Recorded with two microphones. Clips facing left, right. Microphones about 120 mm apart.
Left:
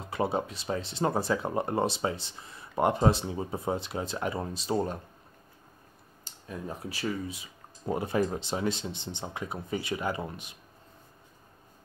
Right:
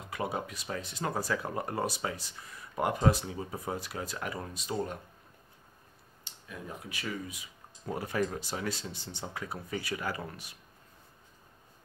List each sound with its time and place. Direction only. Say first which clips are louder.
0.0 s speech: left 5 dB; 30° left (ahead or behind)
6.2 s speech: left 5 dB; 35° left (ahead or behind)